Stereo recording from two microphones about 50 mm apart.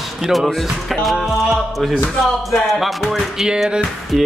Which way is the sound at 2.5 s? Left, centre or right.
Centre.